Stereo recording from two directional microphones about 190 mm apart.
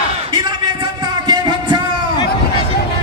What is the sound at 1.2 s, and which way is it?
Music, 20° right (ahead or behind).